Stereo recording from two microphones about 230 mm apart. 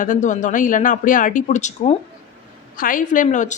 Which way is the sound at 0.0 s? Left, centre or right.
Left.